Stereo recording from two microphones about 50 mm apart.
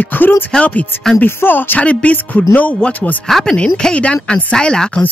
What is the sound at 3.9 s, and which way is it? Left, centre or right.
A woman's voice, left.